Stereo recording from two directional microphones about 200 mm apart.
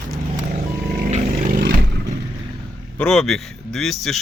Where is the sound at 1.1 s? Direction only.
35° right (ahead or behind).